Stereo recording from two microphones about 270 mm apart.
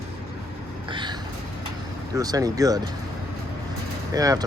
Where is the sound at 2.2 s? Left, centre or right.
Centre.